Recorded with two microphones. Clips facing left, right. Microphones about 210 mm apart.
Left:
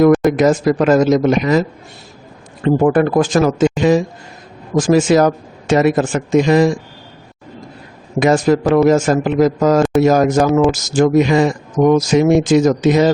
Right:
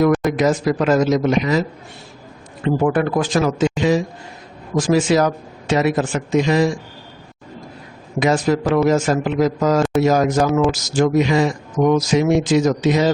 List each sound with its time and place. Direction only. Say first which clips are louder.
0.3 s speech: left 4 dB; 50° left (ahead or behind)
2.6 s speech: left 5 dB; 45° left (ahead or behind)
8.2 s speech: left 4 dB; 50° left (ahead or behind)